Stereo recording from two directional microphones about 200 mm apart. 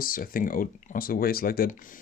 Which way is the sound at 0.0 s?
45° left (ahead or behind).